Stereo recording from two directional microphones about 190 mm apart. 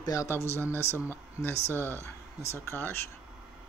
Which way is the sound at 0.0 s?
15° left (ahead or behind).